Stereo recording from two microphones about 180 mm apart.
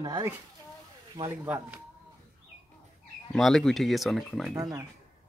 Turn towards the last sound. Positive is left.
turn(degrees=-20)  # may be behind; listen again after turning